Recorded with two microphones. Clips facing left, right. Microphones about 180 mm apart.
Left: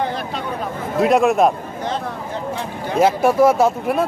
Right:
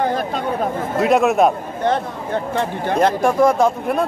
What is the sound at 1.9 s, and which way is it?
Speech, 60° right (ahead or behind).